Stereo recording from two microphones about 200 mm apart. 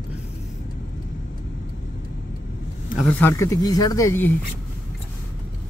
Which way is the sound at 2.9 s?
5° left (ahead or behind).